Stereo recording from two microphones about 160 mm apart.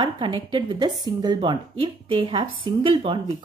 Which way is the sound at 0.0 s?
30° right (ahead or behind).